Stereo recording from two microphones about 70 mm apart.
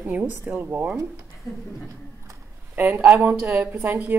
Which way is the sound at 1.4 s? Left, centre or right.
Left.